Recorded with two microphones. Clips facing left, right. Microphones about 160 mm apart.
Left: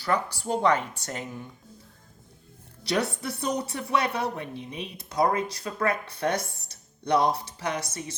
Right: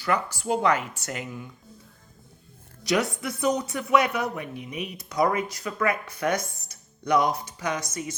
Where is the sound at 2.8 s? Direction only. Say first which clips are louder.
Right 2 dB; 35° left (ahead or behind).